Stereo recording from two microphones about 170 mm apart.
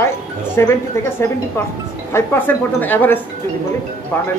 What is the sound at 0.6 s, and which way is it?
Speech, 15° left (ahead or behind).